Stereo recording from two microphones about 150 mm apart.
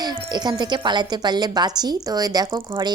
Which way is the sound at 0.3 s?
30° right (ahead or behind).